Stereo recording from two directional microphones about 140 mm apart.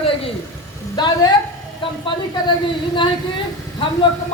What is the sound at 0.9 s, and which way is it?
Speech, 30° left (ahead or behind).